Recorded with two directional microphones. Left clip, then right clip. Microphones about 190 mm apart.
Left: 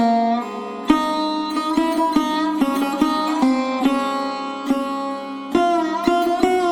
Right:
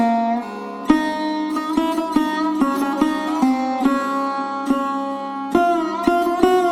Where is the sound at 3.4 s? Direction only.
45° right (ahead or behind).